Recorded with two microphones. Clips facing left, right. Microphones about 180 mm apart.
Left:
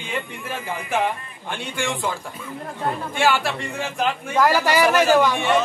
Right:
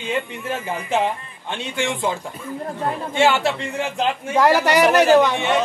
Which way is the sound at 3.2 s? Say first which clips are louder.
Right 4 dB; 25° right (ahead or behind).